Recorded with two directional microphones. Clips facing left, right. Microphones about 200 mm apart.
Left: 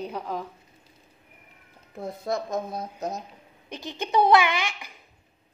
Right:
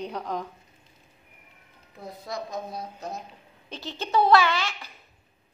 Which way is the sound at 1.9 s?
50° left (ahead or behind).